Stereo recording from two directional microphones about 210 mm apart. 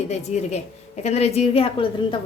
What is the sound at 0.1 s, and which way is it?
A woman's voice, 35° left (ahead or behind).